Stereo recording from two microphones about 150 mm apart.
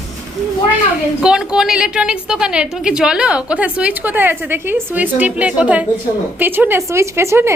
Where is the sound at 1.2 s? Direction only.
5° right (ahead or behind).